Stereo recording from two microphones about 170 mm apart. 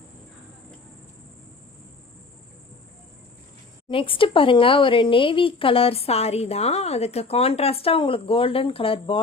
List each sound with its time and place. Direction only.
3.8 s speech: 30° left (ahead or behind)